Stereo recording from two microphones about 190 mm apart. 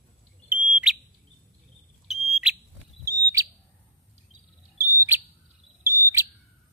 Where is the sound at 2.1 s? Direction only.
Centre (ahead or behind).